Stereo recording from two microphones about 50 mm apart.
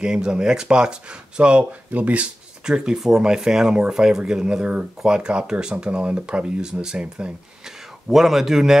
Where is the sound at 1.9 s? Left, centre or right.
Right.